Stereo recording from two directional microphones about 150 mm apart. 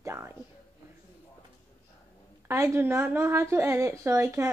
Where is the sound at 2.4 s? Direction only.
20° right (ahead or behind).